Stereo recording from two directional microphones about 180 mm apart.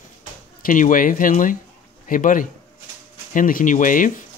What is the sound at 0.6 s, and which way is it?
Speech, 50° left (ahead or behind).